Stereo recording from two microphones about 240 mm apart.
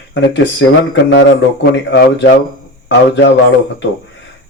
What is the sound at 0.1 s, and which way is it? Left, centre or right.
Speech, left.